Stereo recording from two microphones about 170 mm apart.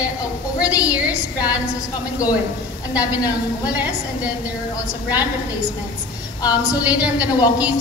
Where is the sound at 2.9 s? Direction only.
20° left (ahead or behind).